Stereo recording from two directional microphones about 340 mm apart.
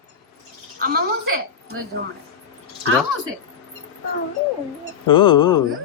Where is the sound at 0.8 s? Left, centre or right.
Right.